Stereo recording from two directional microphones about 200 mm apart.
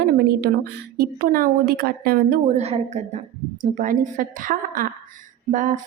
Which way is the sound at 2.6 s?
30° right (ahead or behind).